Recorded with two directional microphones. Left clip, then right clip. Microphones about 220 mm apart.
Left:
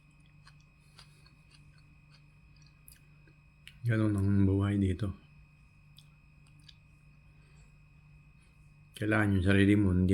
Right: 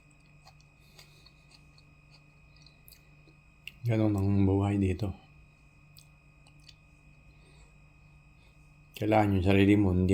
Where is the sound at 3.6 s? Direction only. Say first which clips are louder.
Right 3 dB; 15° left (ahead or behind).